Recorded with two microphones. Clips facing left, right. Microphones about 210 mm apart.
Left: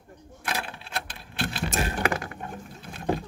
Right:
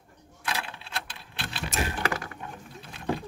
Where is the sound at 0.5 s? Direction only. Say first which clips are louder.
Left 2 dB; 50° left (ahead or behind).